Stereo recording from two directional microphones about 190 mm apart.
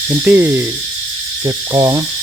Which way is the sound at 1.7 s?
20° right (ahead or behind).